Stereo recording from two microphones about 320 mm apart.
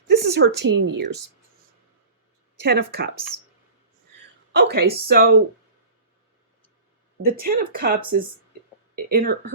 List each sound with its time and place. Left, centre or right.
0.1 s speech: right
2.6 s speech: right
4.5 s speech: right
7.3 s speech: right